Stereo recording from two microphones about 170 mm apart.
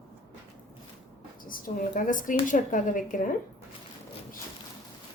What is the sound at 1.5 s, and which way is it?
A woman's voice, 55° left (ahead or behind).